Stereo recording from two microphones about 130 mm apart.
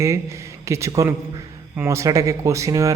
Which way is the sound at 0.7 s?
25° right (ahead or behind).